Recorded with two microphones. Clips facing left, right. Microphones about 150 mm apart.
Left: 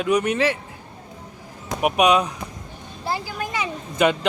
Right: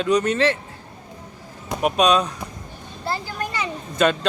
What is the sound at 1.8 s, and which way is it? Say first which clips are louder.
A child's voice: even; 15° left (ahead or behind).